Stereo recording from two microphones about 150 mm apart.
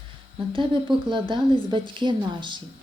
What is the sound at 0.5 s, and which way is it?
A woman's voice, 35° right (ahead or behind).